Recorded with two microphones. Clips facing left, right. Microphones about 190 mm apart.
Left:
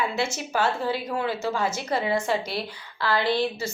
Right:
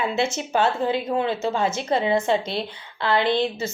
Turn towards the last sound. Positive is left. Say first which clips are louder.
# right 2 dB
turn(degrees=-20)  # may be behind; listen again after turning